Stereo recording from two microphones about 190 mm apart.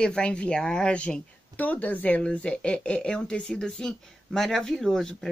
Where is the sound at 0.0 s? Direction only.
5° left (ahead or behind).